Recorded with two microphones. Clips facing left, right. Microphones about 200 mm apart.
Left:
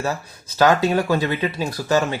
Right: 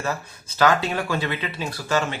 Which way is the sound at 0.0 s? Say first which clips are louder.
Left 3 dB; 40° left (ahead or behind).